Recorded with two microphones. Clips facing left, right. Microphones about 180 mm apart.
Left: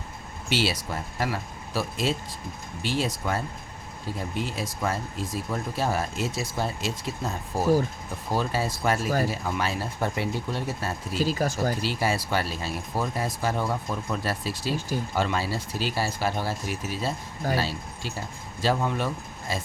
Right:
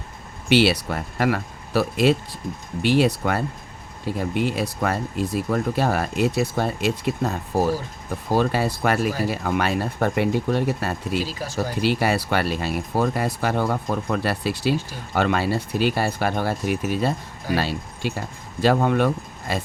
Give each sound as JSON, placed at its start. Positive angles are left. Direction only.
{"t": 0.4, "sound": "speech", "side_deg": -65}
{"t": 11.3, "sound": "speech", "side_deg": 50}
{"t": 11.8, "sound": "speech", "side_deg": -65}